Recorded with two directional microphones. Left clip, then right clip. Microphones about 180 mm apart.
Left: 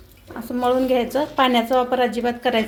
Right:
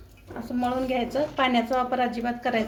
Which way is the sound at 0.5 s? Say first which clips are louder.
Left 8 dB; 40° left (ahead or behind).